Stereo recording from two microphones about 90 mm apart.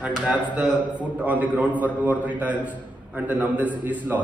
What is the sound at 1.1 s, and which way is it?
A man's voice, 15° right (ahead or behind).